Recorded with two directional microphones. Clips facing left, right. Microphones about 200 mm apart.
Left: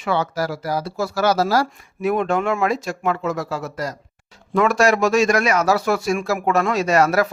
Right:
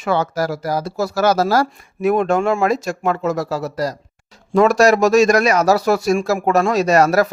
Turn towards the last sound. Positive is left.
turn(degrees=-40)  # may be behind; listen again after turning